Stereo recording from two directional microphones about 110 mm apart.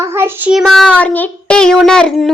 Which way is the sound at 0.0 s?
20° right (ahead or behind).